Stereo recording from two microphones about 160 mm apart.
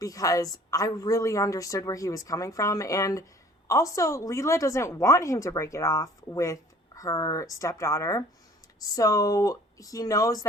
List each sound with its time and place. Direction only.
0.0 s a woman's voice: 20° left (ahead or behind)